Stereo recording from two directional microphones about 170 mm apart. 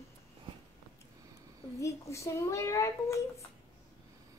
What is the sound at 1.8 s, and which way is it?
A woman's voice, 15° left (ahead or behind).